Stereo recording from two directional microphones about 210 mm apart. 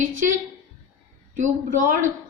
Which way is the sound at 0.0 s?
35° right (ahead or behind).